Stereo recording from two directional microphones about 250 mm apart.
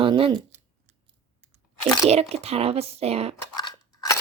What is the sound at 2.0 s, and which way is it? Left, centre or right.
Speech, right.